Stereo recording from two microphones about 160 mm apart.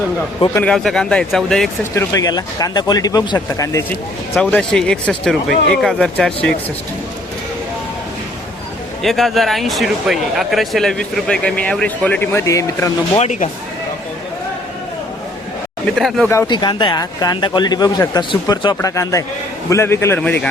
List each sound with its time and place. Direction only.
0.3 s speech: 25° left (ahead or behind)
0.6 s speech: 5° left (ahead or behind)
2.0 s speech: 20° left (ahead or behind)
4.4 s speech: 5° left (ahead or behind)
9.0 s speech: centre (ahead or behind); by 12.9 s 20° left (ahead or behind)
13.1 s speech: 45° left (ahead or behind)
16.0 s speech: centre (ahead or behind)
16.5 s a man's voice: 30° left (ahead or behind); by 20.5 s 10° left (ahead or behind)